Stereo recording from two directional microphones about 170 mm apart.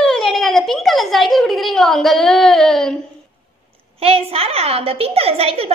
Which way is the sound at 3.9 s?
35° right (ahead or behind).